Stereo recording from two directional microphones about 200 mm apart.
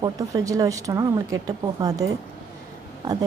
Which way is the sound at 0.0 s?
15° right (ahead or behind).